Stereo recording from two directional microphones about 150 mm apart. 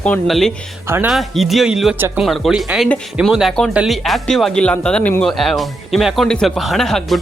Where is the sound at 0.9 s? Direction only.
15° right (ahead or behind).